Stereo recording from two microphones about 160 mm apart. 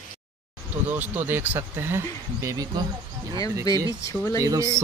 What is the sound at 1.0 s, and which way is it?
Speech, 10° right (ahead or behind).